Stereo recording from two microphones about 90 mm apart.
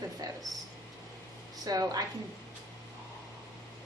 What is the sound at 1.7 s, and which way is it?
Speech, 45° right (ahead or behind).